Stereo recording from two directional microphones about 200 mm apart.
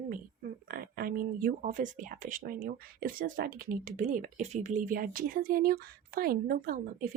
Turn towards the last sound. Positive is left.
turn(degrees=-45)  # may be behind; listen again after turning